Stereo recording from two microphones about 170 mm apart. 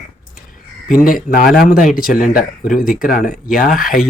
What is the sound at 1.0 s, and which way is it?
Speech, 55° left (ahead or behind).